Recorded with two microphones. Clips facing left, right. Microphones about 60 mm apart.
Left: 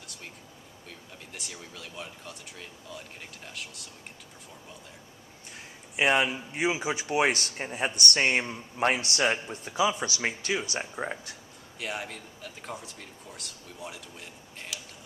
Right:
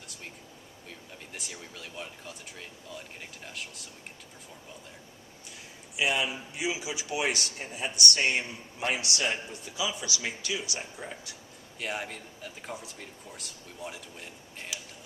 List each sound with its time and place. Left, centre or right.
0.9 s speech: centre
6.0 s speech: left
11.8 s speech: centre